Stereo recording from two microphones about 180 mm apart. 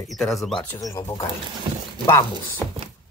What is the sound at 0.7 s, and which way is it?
Speech, 20° left (ahead or behind).